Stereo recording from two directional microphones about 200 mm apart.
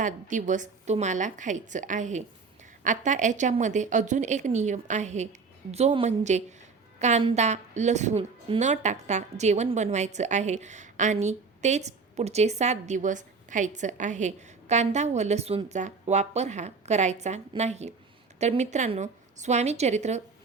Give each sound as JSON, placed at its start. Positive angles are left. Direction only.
{"t": 0.0, "sound": "a woman's voice", "side_deg": -40}